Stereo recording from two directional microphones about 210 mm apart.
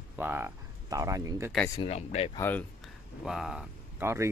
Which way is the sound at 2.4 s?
10° left (ahead or behind).